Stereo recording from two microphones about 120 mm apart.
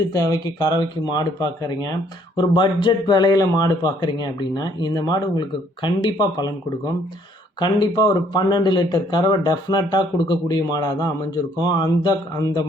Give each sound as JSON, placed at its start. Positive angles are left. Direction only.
{"t": 0.1, "sound": "speech", "side_deg": 30}
{"t": 7.6, "sound": "speech", "side_deg": 35}